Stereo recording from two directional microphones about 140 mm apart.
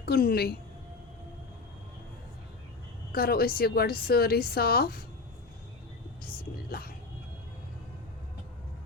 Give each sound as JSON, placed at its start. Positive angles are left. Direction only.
{"t": 0.0, "sound": "a woman's voice", "side_deg": 90}
{"t": 3.1, "sound": "a woman's voice", "side_deg": 90}
{"t": 6.7, "sound": "speech", "side_deg": 90}